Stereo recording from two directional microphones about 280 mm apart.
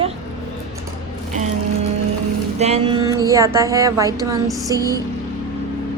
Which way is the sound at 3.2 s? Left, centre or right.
Centre.